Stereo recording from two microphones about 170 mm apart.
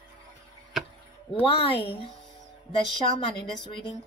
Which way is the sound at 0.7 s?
Centre (ahead or behind).